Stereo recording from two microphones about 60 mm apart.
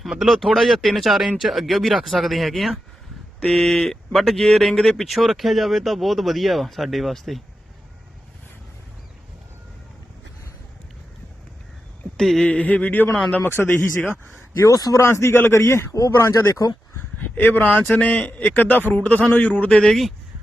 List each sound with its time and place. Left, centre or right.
0.0 s speech: centre
12.1 s a sound: centre
12.5 s a man's voice: left
13.5 s speech: left
14.6 s speech: left
15.0 s speech: left
15.5 s a man's voice: left
16.9 s a man's voice: left
19.7 s speech: centre